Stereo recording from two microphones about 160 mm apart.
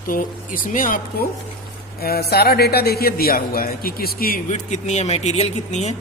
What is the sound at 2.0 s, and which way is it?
A man's voice, 80° left.